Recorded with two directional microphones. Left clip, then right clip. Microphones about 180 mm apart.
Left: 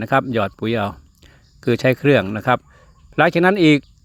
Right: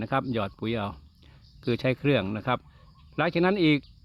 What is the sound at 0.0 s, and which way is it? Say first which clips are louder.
Speech: left 10 dB; 25° left (ahead or behind).